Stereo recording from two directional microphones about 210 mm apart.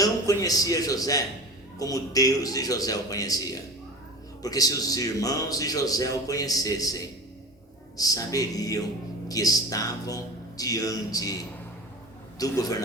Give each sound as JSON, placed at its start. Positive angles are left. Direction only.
{"t": 0.0, "sound": "a man's voice", "side_deg": 15}
{"t": 7.9, "sound": "a man's voice", "side_deg": 15}